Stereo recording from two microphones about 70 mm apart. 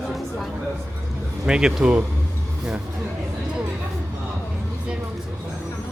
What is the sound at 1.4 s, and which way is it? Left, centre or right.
Speech, centre.